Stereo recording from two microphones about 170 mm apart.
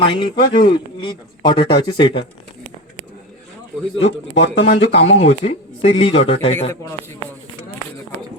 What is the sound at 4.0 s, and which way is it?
Speech, 90° left.